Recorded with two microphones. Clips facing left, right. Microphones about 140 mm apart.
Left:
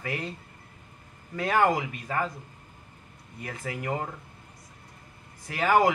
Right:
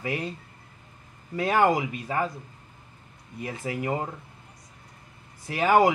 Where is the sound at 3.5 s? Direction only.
25° right (ahead or behind).